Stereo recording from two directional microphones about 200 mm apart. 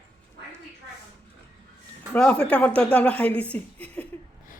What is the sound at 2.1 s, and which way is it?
A woman's voice, 5° left (ahead or behind).